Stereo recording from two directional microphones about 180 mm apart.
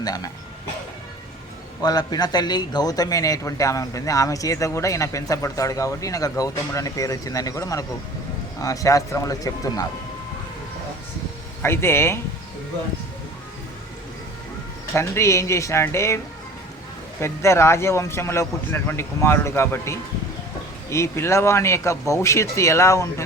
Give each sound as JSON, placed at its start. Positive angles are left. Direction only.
{"t": 0.0, "sound": "speech", "side_deg": 20}
{"t": 1.8, "sound": "a man's voice", "side_deg": 20}
{"t": 11.6, "sound": "speech", "side_deg": 15}
{"t": 14.9, "sound": "speech", "side_deg": 15}